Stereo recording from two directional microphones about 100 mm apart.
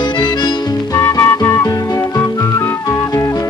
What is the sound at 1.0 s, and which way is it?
Music, 25° left (ahead or behind).